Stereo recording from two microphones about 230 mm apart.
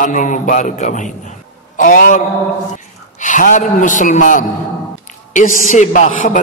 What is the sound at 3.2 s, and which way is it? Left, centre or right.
A man's voice, left.